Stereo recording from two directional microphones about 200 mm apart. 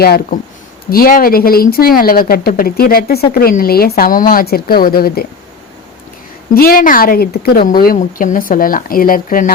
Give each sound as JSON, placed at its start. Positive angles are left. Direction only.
{"t": 0.0, "sound": "speech", "side_deg": 50}
{"t": 6.5, "sound": "speech", "side_deg": 45}